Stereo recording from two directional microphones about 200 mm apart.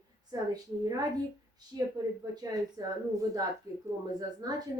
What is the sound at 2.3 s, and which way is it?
A woman's voice, 20° right (ahead or behind).